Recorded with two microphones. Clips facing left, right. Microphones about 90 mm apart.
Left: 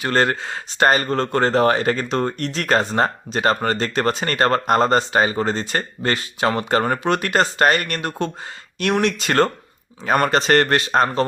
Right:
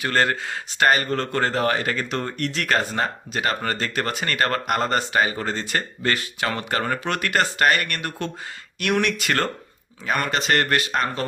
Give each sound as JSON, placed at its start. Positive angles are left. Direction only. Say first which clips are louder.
{"t": 0.0, "sound": "speech", "louder": "left 3 dB", "side_deg": 30}
{"t": 10.1, "sound": "speech", "louder": "left 6 dB", "side_deg": 40}